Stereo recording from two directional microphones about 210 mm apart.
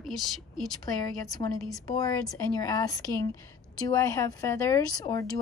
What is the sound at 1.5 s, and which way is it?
Speech, centre (ahead or behind).